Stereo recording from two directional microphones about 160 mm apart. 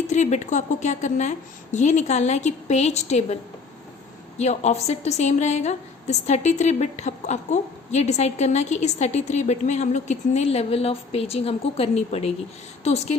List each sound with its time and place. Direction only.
0.1 s a woman's voice: 45° left (ahead or behind)
4.4 s a woman's voice: 45° left (ahead or behind)